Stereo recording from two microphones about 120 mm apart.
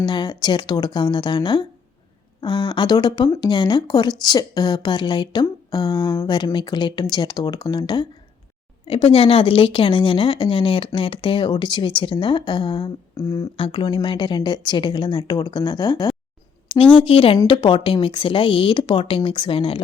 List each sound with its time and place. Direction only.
0.0 s speech: 40° left (ahead or behind)
8.9 s speech: 50° left (ahead or behind)
13.1 s speech: 25° left (ahead or behind)
13.6 s speech: 40° left (ahead or behind)
16.6 s speech: 50° left (ahead or behind)
17.3 s speech: 40° left (ahead or behind)